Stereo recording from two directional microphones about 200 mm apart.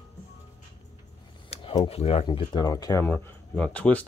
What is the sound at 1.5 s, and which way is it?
Speech, 30° left (ahead or behind).